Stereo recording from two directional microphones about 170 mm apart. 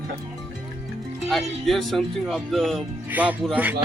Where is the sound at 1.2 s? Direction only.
Centre (ahead or behind).